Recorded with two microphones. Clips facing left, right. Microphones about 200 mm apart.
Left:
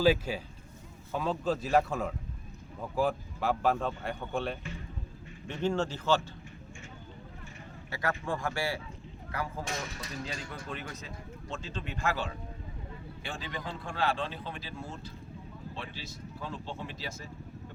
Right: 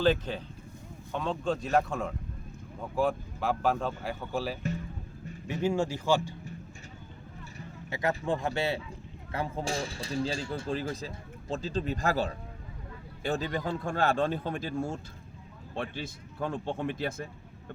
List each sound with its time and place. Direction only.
0.0 s speech: 10° left (ahead or behind); by 6.3 s 10° right (ahead or behind)
7.9 s speech: 20° right (ahead or behind); by 17.2 s 55° right (ahead or behind)